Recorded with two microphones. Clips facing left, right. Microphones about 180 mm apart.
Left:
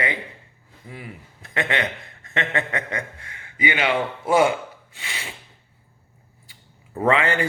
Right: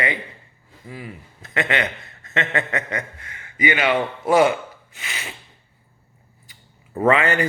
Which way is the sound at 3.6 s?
20° left (ahead or behind).